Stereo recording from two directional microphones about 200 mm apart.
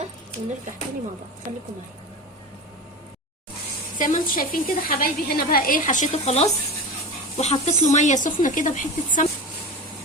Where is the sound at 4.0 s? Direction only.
40° left (ahead or behind).